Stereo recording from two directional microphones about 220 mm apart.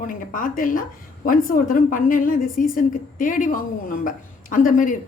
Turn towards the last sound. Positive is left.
turn(degrees=35)  # may be behind; listen again after turning